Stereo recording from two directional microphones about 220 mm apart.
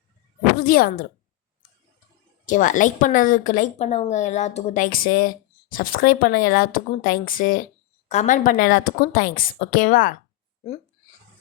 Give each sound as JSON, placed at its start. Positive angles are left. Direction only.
{"t": 0.6, "sound": "speech", "side_deg": 40}
{"t": 2.5, "sound": "speech", "side_deg": 35}